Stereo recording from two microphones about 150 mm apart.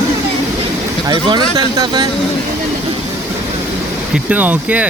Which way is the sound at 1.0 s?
30° right (ahead or behind).